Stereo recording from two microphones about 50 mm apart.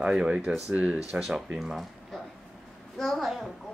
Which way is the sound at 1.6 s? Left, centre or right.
Centre.